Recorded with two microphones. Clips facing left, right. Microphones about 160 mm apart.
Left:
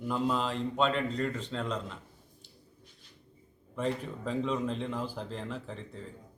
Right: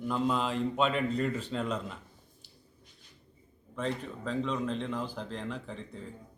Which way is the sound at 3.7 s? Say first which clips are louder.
Left 2 dB; 10° left (ahead or behind).